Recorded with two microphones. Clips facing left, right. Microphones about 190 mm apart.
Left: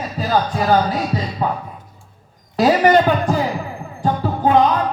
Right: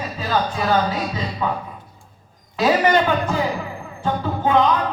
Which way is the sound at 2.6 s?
40° left (ahead or behind).